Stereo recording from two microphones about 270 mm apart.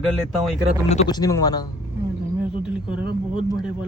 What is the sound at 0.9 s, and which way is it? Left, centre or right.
Speech, centre.